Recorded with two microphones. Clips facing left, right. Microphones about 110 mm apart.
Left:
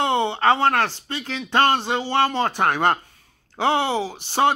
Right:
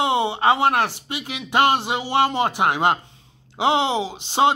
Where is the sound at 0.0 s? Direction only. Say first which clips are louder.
Even; 15° right (ahead or behind).